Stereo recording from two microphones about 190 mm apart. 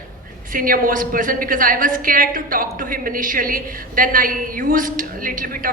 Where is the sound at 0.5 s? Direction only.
50° right (ahead or behind).